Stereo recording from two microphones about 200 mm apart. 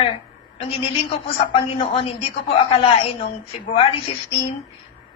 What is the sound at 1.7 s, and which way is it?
A woman's voice, 30° left (ahead or behind).